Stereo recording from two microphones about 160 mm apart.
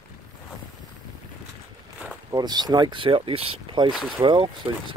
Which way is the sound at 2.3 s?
25° right (ahead or behind).